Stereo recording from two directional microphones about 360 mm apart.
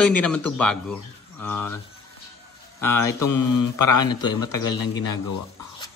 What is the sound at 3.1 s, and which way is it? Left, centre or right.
Mantra, left.